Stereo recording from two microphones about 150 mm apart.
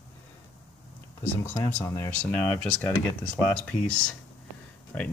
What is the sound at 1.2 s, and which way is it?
Speech, 15° left (ahead or behind).